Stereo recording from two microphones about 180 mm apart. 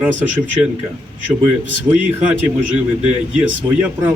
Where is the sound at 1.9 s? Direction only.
15° right (ahead or behind).